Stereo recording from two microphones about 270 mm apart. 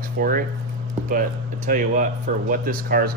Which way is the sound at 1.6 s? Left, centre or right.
Right.